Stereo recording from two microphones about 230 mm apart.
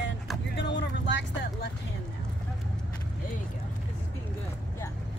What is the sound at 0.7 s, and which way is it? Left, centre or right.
Vehicle, left.